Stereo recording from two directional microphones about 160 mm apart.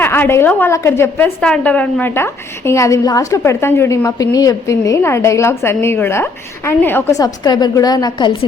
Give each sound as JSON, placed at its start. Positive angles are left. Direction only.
{"t": 0.0, "sound": "a woman's voice", "side_deg": 15}